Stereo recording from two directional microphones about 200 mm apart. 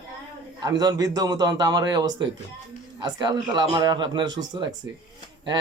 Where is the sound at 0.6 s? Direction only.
20° right (ahead or behind).